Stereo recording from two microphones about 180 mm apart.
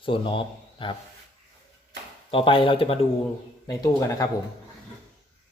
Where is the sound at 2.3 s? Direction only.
30° left (ahead or behind).